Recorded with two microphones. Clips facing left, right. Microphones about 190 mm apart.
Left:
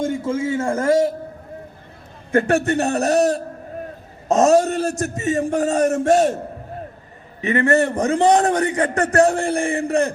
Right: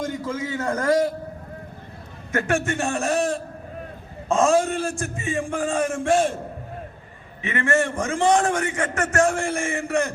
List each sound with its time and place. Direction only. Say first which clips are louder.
0.0 s a man's voice: left 6 dB; 25° left (ahead or behind)
2.3 s a man's voice: left 6 dB; 35° left (ahead or behind)
7.4 s a man's voice: left 5 dB; 35° left (ahead or behind)